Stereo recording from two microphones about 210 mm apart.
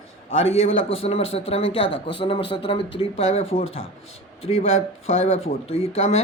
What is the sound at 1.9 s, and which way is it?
Speech, 55° left (ahead or behind).